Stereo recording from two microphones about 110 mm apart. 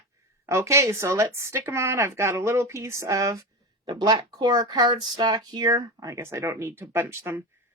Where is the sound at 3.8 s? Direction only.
40° right (ahead or behind).